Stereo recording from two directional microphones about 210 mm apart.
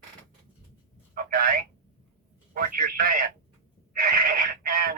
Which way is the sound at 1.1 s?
45° right (ahead or behind).